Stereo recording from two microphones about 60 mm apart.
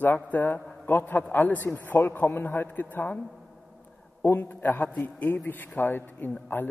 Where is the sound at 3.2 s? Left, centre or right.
Centre.